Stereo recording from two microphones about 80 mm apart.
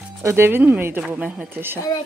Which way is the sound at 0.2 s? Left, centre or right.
Right.